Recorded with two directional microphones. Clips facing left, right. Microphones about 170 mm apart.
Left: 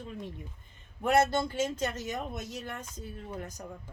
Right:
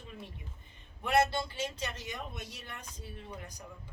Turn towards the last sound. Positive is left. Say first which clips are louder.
# left 5 dB
turn(degrees=45)  # may be behind; listen again after turning